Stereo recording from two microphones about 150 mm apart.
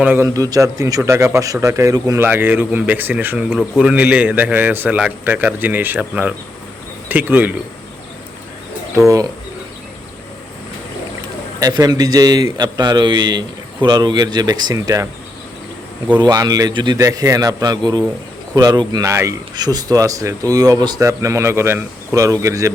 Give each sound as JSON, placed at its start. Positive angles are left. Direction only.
{"t": 0.0, "sound": "a man's voice", "side_deg": -15}
{"t": 3.5, "sound": "speech", "side_deg": 5}
{"t": 3.8, "sound": "a man's voice", "side_deg": -10}
{"t": 11.6, "sound": "speech", "side_deg": -25}
{"t": 16.2, "sound": "speech", "side_deg": -25}